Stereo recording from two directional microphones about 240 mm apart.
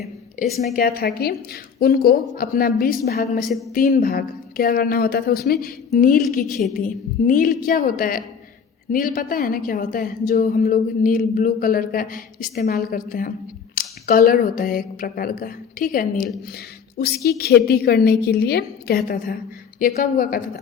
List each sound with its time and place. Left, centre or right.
0.7 s a woman's voice: left